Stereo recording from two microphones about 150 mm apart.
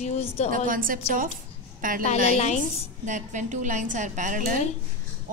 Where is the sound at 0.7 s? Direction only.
65° right (ahead or behind).